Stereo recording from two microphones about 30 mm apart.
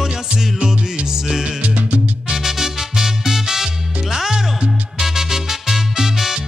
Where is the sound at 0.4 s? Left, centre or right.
Centre.